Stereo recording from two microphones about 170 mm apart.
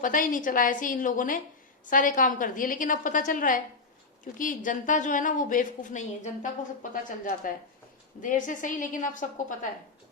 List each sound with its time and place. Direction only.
0.0 s speech: 50° left (ahead or behind)